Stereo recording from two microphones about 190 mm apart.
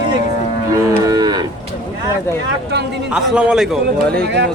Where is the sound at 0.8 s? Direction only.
20° right (ahead or behind).